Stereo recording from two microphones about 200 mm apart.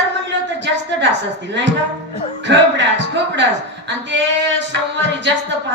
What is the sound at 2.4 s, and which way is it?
A woman's voice, 65° right (ahead or behind).